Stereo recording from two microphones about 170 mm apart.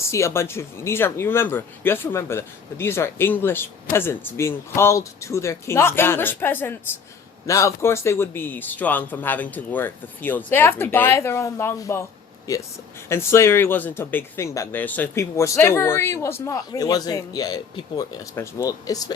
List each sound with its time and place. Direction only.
0.1 s speech: 15° left (ahead or behind)